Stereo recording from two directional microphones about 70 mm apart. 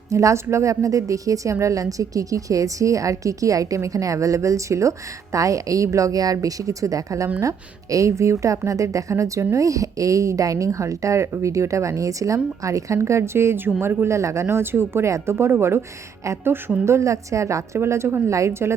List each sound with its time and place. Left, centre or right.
0.1 s a woman's voice: right
14.4 s speech: right
16.8 s a woman's voice: right